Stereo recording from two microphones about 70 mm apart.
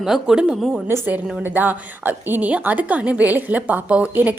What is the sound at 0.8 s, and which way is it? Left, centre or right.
A woman's voice, right.